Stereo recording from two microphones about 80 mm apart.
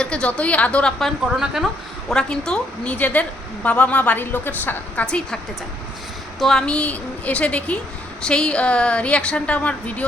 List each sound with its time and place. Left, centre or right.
0.0 s a woman's voice: centre
1.2 s a woman's voice: centre
2.0 s a woman's voice: centre
2.9 s a woman's voice: left
5.0 s a woman's voice: centre
6.4 s a woman's voice: centre